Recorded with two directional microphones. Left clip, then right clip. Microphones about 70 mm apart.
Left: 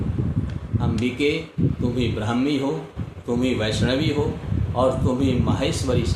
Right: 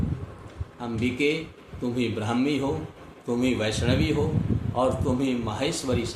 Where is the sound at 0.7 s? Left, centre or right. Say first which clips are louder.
Left 3 dB; right.